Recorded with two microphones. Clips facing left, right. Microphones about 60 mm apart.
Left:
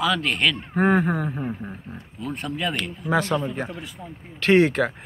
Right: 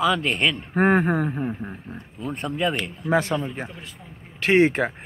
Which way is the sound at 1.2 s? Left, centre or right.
Centre.